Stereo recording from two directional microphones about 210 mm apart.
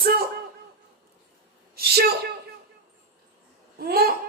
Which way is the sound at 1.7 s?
50° right (ahead or behind).